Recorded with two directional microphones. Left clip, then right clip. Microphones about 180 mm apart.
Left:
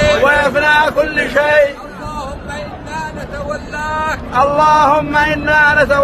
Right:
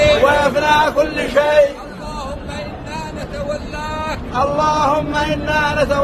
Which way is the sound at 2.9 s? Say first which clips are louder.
Left 5 dB; 15° left (ahead or behind).